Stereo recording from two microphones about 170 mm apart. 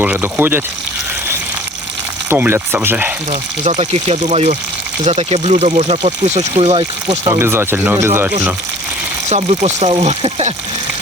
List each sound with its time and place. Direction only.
0.0 s speech: 10° right (ahead or behind)
2.3 s speech: 10° right (ahead or behind)
3.6 s speech: 40° right (ahead or behind)
7.3 s speech: 15° right (ahead or behind)
9.3 s speech: 40° right (ahead or behind)